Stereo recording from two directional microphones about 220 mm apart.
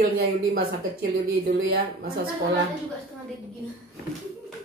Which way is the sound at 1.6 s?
45° right (ahead or behind).